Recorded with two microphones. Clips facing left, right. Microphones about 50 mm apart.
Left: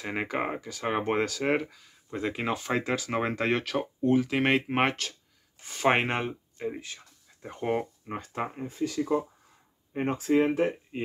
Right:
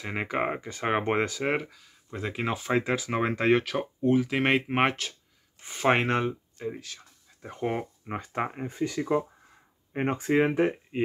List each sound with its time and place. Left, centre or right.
0.0 s speech: centre
0.6 s speech: right
1.4 s speech: centre
5.9 s speech: centre
7.4 s speech: centre
8.1 s speech: right